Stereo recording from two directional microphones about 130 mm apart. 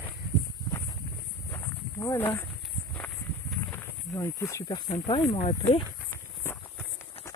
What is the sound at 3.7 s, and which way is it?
Speech, 20° left (ahead or behind).